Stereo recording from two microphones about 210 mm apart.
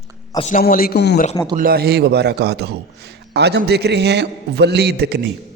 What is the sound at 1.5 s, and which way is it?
A man's voice, 45° right (ahead or behind).